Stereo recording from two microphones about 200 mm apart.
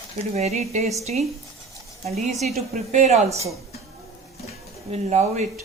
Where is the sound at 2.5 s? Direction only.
35° right (ahead or behind).